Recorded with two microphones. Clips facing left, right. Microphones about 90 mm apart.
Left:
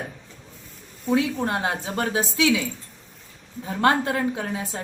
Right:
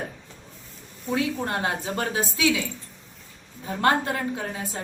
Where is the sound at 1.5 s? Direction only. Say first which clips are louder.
Left 1 dB; 15° left (ahead or behind).